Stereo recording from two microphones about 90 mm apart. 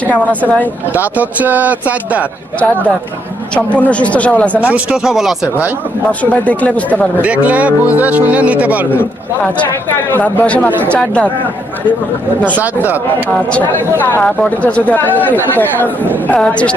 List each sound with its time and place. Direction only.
0.1 s a man's voice: 15° left (ahead or behind)
0.9 s speech: 20° right (ahead or behind)
3.5 s a man's voice: 15° left (ahead or behind)
4.6 s speech: 15° right (ahead or behind)
5.0 s speech: 5° right (ahead or behind)
6.4 s a man's voice: 15° left (ahead or behind)
7.2 s speech: 15° right (ahead or behind)
10.1 s a man's voice: 20° left (ahead or behind)
12.5 s speech: 20° right (ahead or behind)
13.3 s a man's voice: 15° left (ahead or behind)